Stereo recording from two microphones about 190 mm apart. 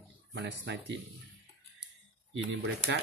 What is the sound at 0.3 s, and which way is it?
Speech, 65° right (ahead or behind).